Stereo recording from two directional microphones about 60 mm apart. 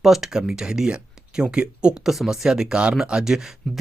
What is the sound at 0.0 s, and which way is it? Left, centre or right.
Speech, centre.